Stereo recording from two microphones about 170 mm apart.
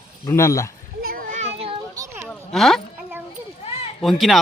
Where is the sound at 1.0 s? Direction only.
60° right (ahead or behind); by 1.8 s 35° right (ahead or behind).